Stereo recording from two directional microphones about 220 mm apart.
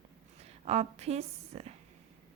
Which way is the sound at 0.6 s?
30° right (ahead or behind).